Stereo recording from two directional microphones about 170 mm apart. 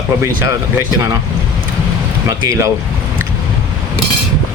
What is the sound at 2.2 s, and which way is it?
Speech, 20° right (ahead or behind).